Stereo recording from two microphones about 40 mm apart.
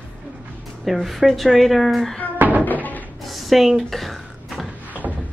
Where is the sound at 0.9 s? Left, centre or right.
Centre.